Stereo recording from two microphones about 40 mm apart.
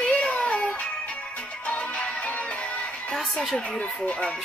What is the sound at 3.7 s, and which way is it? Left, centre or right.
Speech, left.